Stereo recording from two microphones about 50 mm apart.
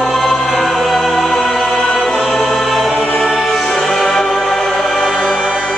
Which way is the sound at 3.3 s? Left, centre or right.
Centre.